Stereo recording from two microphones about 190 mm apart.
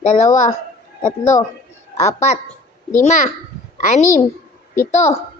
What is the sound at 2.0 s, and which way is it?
A child's voice, 35° left (ahead or behind).